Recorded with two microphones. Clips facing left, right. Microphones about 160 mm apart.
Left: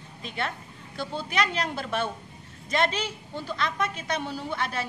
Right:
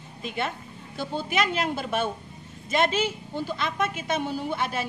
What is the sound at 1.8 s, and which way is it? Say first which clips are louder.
A woman's voice: right 2 dB; 10° right (ahead or behind).